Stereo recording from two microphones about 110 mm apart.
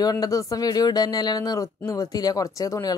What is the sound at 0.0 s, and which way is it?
Speech, 35° left (ahead or behind).